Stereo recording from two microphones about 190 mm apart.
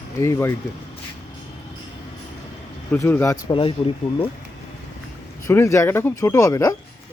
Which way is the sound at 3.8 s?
25° left (ahead or behind).